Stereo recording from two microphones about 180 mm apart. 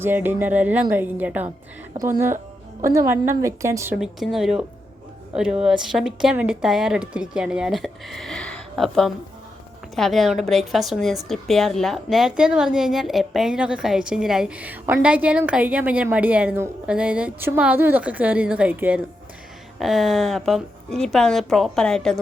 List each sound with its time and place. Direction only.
0.0 s a woman's voice: 10° right (ahead or behind)
3.9 s a woman's voice: centre (ahead or behind)